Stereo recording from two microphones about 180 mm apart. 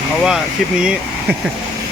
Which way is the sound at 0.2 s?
5° right (ahead or behind).